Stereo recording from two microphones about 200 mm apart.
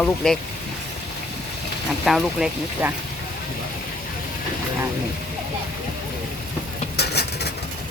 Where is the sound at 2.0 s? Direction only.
Centre (ahead or behind).